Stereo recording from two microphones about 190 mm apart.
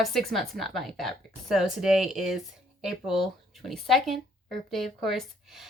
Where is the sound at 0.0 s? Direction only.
Centre (ahead or behind).